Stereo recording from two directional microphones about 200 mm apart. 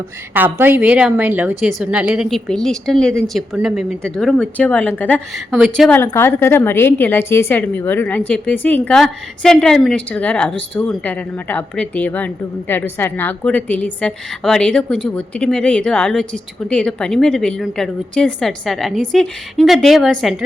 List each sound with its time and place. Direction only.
0.3 s a woman's voice: 10° right (ahead or behind)